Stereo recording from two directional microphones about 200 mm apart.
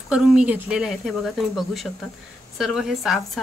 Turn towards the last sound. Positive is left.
turn(degrees=0)  # may be behind; listen again after turning